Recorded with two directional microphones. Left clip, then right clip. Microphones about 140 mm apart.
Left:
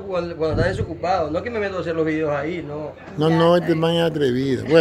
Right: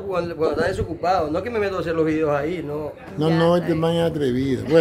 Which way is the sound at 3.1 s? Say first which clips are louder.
Left 2 dB; centre (ahead or behind).